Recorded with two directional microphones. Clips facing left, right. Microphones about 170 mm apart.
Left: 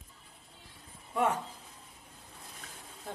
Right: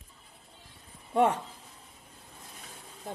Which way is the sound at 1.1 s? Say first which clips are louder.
Right 5 dB; 30° right (ahead or behind).